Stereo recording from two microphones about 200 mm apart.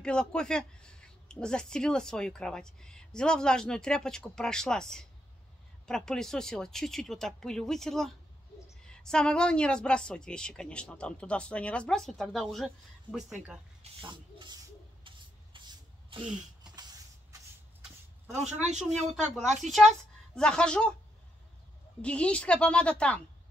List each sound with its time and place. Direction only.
0.0 s speech: 5° left (ahead or behind)
14.0 s speech: 25° right (ahead or behind)
15.0 s spray: 25° right (ahead or behind)
18.3 s speech: 35° right (ahead or behind)
19.7 s a woman's voice: centre (ahead or behind)
22.0 s speech: 5° left (ahead or behind)